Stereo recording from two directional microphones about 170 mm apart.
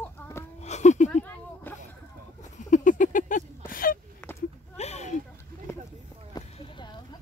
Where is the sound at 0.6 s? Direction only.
45° left (ahead or behind).